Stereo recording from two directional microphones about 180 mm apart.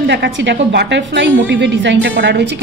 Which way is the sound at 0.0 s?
70° right (ahead or behind).